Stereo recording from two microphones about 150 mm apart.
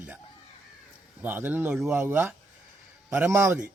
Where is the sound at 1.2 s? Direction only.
15° right (ahead or behind).